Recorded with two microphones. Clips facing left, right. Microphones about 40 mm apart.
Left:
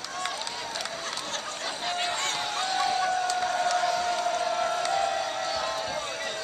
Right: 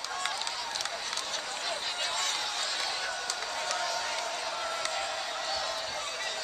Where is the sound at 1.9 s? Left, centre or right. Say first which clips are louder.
Left 4 dB; left.